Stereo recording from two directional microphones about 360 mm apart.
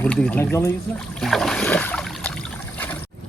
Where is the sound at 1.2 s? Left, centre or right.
Centre.